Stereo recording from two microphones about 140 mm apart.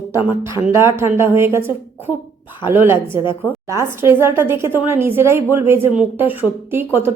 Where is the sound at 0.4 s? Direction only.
20° right (ahead or behind).